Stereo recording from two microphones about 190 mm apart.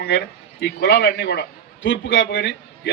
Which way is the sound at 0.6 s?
65° left (ahead or behind).